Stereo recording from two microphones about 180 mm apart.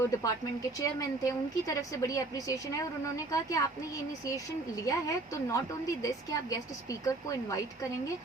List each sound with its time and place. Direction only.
0.1 s speech: 20° left (ahead or behind)
4.9 s a woman's voice: 20° left (ahead or behind)